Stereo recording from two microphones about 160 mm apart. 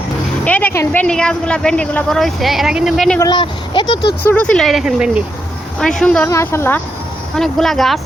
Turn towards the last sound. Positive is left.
turn(degrees=0)  # may be behind; listen again after turning